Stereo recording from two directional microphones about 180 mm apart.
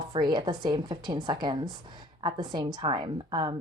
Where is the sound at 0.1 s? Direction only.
25° right (ahead or behind).